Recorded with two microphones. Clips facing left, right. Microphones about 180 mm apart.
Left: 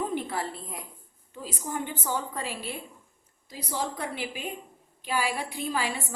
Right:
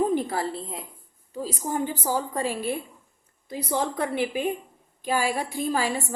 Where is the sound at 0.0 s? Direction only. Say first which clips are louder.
Right 6 dB; 40° right (ahead or behind).